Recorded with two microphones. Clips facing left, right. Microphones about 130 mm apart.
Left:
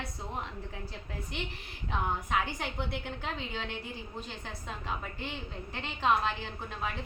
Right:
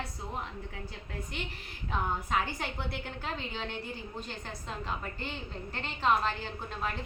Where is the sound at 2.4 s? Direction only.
15° left (ahead or behind).